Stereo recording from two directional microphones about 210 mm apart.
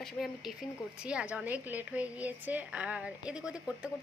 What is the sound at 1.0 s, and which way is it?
A woman's voice, 5° right (ahead or behind).